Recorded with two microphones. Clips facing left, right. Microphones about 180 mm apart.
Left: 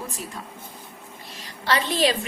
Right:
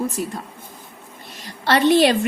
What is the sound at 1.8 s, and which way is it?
Speech, 65° right (ahead or behind).